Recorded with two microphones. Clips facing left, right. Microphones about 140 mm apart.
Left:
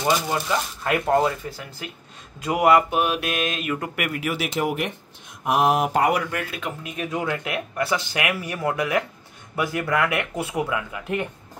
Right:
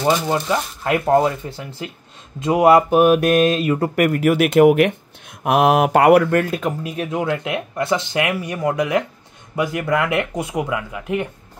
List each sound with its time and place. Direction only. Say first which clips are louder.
0.3 s speech: right 4 dB; 20° right (ahead or behind)
2.9 s speech: right 10 dB; 45° right (ahead or behind); by 4.9 s 65° right (ahead or behind)
5.4 s speech: right 5 dB; 75° right (ahead or behind); by 7.1 s 35° right (ahead or behind)
7.1 s speech: right 4 dB; 25° right (ahead or behind)